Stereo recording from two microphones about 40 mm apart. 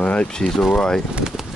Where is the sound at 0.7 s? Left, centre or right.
Centre.